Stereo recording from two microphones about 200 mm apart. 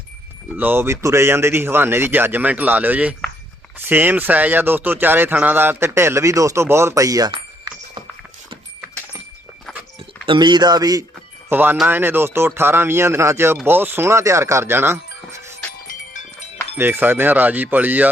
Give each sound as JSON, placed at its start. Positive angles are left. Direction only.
{"t": 0.5, "sound": "speech", "side_deg": -10}
{"t": 10.2, "sound": "speech", "side_deg": -20}
{"t": 15.9, "sound": "a sound", "side_deg": 40}
{"t": 16.7, "sound": "speech", "side_deg": -10}